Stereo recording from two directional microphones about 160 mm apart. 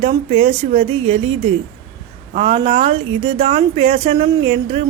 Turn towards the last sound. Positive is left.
turn(degrees=-40)  # may be behind; listen again after turning